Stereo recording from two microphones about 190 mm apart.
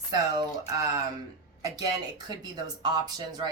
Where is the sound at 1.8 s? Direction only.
20° right (ahead or behind).